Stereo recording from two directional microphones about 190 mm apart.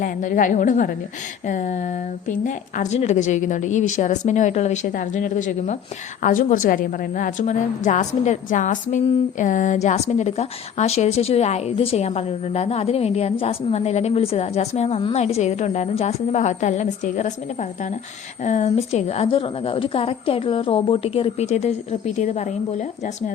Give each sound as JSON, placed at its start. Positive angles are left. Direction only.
{"t": 0.0, "sound": "a woman's voice", "side_deg": 45}